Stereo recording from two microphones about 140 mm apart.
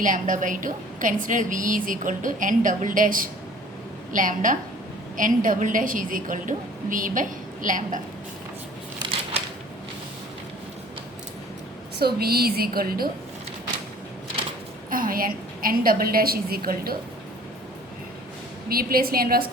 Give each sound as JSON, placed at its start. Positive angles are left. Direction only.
{"t": 0.0, "sound": "a woman's voice", "side_deg": -70}
{"t": 12.0, "sound": "a woman's voice", "side_deg": -90}
{"t": 14.8, "sound": "a woman's voice", "side_deg": -80}
{"t": 18.7, "sound": "a woman's voice", "side_deg": -90}